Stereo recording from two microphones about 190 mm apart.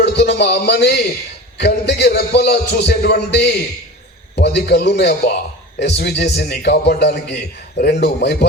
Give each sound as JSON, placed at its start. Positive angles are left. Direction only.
{"t": 0.0, "sound": "a man's voice", "side_deg": 65}